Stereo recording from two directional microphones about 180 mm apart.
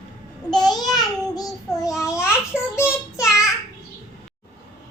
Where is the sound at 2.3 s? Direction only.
15° left (ahead or behind).